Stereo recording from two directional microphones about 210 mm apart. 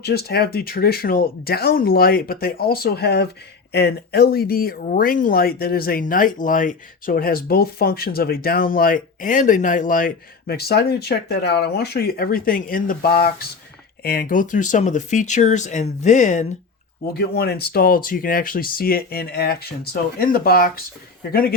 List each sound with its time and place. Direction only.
0.0 s speech: 50° left (ahead or behind)
17.2 s speech: 50° left (ahead or behind)